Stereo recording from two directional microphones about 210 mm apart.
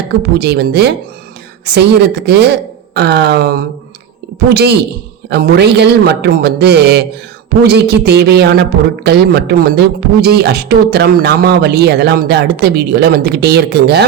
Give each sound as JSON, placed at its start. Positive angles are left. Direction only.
{"t": 0.2, "sound": "speech", "side_deg": -50}